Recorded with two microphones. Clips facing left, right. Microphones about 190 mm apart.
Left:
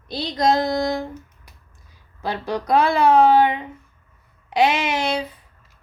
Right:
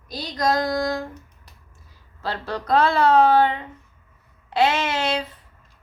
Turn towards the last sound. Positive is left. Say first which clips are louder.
# left 1 dB
turn(degrees=10)  # may be behind; listen again after turning